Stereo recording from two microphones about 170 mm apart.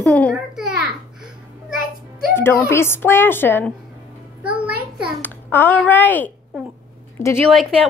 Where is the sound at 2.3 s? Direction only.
15° left (ahead or behind).